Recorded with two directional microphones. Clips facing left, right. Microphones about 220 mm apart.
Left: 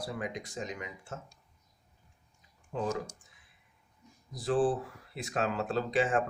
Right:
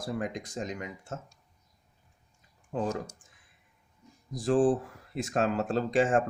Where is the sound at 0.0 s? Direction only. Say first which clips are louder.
Right 4 dB; 45° right (ahead or behind).